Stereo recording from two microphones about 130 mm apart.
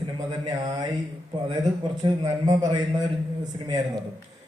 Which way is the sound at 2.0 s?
30° right (ahead or behind).